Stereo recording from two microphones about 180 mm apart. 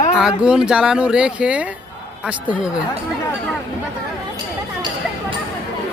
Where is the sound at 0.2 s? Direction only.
5° right (ahead or behind).